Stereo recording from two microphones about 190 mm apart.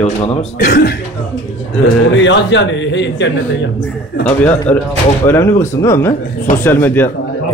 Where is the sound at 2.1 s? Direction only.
70° left (ahead or behind).